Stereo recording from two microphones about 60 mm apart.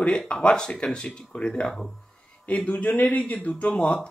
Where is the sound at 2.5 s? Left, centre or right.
Left.